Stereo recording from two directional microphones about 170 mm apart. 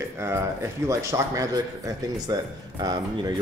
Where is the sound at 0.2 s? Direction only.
15° right (ahead or behind).